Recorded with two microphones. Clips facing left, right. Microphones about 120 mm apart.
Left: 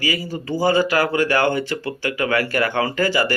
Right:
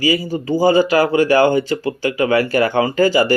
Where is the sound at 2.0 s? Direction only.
25° right (ahead or behind).